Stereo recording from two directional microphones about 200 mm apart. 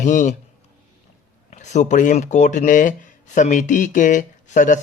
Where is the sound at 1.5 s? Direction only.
35° left (ahead or behind).